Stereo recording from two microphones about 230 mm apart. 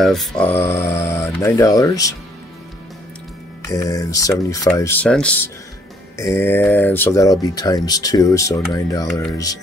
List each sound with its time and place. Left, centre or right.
0.0 s speech: centre
3.6 s speech: centre